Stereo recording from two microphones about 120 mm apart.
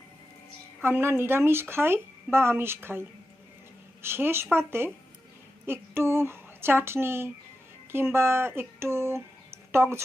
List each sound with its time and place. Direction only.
0.8 s speech: 20° right (ahead or behind)